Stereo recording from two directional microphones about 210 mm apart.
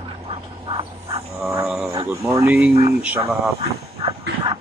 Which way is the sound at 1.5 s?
5° right (ahead or behind).